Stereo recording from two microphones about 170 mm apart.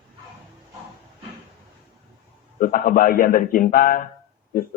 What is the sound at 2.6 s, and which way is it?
A man's voice, 55° left (ahead or behind).